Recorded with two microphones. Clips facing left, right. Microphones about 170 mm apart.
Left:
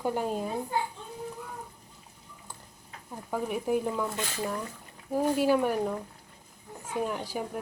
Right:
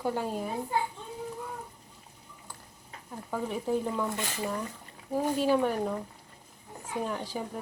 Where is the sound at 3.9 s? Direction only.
Centre (ahead or behind).